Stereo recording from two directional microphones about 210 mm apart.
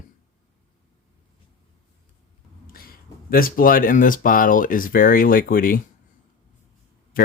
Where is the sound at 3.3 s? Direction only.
45° left (ahead or behind).